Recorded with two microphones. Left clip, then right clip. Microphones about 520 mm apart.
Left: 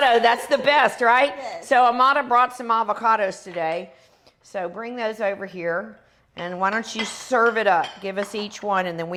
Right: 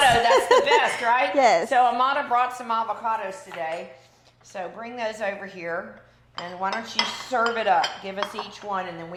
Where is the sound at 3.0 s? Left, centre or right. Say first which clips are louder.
Left 7 dB; left.